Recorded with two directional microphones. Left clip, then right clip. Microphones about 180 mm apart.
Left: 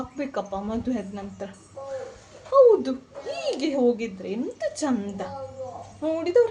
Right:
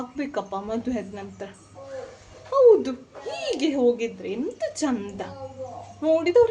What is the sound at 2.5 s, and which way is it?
A woman's voice, 15° right (ahead or behind).